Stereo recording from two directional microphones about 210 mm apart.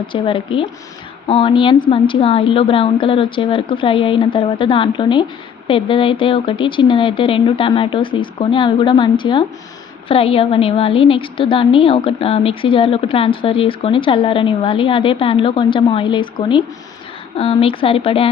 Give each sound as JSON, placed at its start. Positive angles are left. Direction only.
{"t": 0.1, "sound": "a woman's voice", "side_deg": 25}